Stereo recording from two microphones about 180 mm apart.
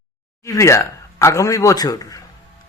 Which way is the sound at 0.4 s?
15° left (ahead or behind).